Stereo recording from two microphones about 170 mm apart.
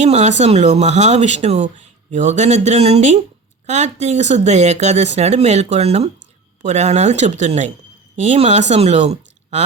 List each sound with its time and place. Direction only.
0.0 s a woman's voice: 40° right (ahead or behind)